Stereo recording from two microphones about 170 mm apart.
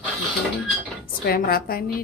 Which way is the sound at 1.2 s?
65° left (ahead or behind).